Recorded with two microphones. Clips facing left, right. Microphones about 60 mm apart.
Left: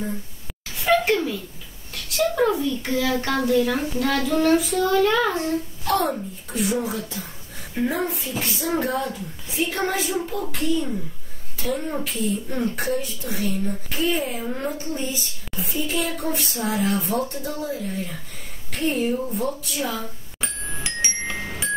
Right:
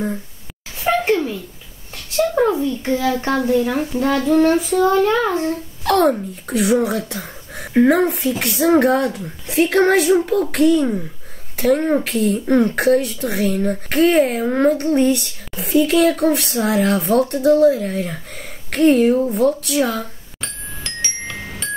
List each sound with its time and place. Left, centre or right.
0.8 s a sound: right
2.0 s a child's voice: right
5.9 s speech: right
20.3 s music: centre